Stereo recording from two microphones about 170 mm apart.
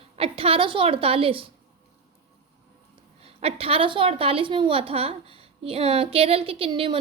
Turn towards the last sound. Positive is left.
turn(degrees=-30)  # may be behind; listen again after turning